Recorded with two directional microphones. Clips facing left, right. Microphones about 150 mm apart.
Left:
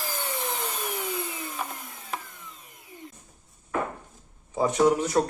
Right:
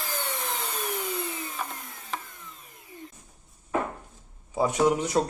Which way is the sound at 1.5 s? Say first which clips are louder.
Left 1 dB; 5° left (ahead or behind).